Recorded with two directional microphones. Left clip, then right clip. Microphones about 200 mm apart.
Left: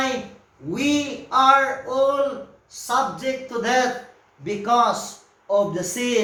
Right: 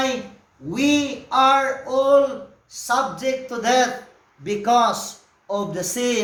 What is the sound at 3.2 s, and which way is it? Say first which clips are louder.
A man's voice: right 2 dB; 55° right (ahead or behind).